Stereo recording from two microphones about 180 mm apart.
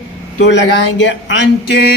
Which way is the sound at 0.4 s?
85° left.